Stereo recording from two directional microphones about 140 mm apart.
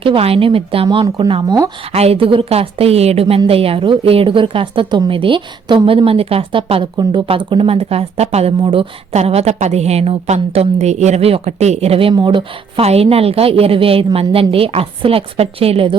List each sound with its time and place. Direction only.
0.0 s a woman's voice: 40° right (ahead or behind)
1.9 s a woman's voice: 45° right (ahead or behind)